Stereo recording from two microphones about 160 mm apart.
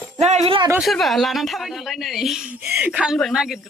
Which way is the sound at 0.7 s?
Centre (ahead or behind).